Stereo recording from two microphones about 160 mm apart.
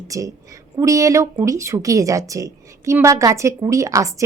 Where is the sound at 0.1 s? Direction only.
20° right (ahead or behind).